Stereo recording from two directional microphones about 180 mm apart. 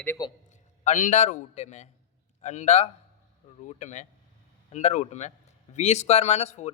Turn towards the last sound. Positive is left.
turn(degrees=40)  # may be behind; listen again after turning